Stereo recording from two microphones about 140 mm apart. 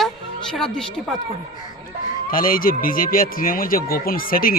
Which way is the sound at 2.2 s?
90° left.